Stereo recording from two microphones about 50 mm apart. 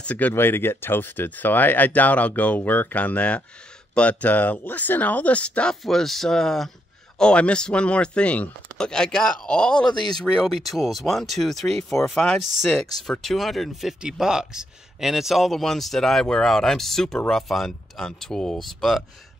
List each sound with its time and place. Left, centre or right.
0.0 s speech: left
0.3 s speech: left
5.9 s speech: centre
7.2 s speech: centre
8.7 s speech: centre